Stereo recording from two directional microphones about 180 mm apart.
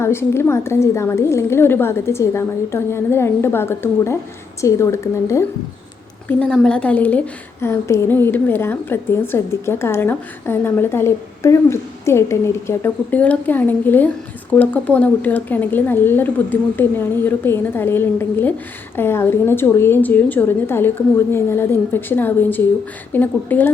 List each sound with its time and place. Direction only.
0.0 s a woman's voice: 15° left (ahead or behind)
6.2 s a woman's voice: 5° left (ahead or behind)